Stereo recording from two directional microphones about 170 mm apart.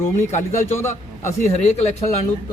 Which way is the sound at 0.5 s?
15° left (ahead or behind).